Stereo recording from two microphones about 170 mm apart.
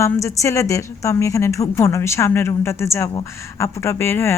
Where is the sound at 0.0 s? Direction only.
15° left (ahead or behind).